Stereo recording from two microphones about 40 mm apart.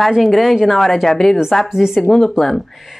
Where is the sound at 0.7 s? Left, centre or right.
Centre.